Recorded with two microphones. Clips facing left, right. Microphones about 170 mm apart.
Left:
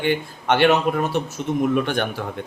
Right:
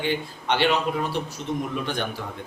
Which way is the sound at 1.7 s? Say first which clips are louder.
Left 7 dB; 60° left (ahead or behind).